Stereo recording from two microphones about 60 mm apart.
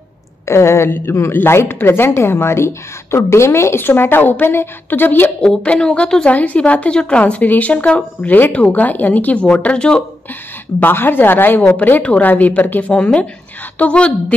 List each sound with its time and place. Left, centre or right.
0.5 s speech: left
0.8 s a woman's voice: left
1.3 s a woman's voice: left
5.4 s a woman's voice: centre
6.3 s a woman's voice: left
10.8 s a woman's voice: left
12.9 s a woman's voice: centre